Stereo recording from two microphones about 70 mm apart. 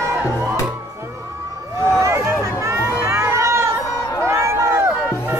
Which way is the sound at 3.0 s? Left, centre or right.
Right.